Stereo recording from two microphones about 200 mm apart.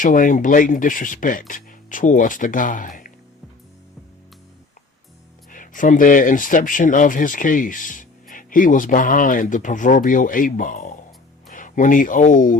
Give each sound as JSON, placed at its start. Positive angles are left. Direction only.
{"t": 0.0, "sound": "speech", "side_deg": 40}
{"t": 5.5, "sound": "speech", "side_deg": 40}